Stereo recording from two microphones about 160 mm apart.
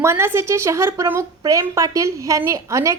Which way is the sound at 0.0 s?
15° right (ahead or behind).